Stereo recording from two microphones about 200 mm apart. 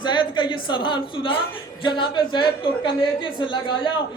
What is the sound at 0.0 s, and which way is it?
A woman's voice, 25° left (ahead or behind).